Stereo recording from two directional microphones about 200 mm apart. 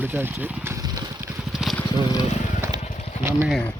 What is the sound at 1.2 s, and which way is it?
Vehicle, centre (ahead or behind).